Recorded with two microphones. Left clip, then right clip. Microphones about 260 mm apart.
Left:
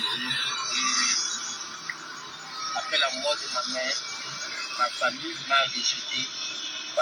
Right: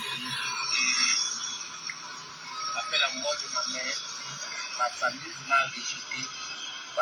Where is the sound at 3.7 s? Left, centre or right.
Centre.